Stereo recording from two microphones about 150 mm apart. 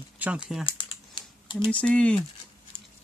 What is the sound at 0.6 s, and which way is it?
Typing, 35° left (ahead or behind).